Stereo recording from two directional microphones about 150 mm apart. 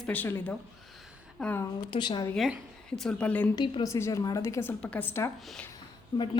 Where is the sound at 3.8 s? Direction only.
20° left (ahead or behind).